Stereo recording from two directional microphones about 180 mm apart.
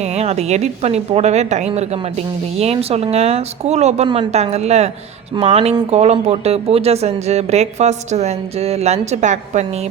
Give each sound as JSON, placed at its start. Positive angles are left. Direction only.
{"t": 0.0, "sound": "a woman's voice", "side_deg": -35}